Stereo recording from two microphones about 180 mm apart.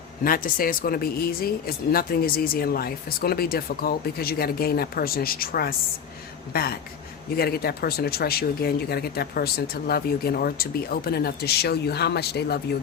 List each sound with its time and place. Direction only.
0.3 s speech: 50° left (ahead or behind)